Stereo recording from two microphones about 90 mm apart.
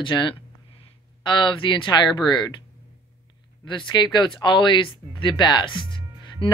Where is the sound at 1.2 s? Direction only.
60° left (ahead or behind).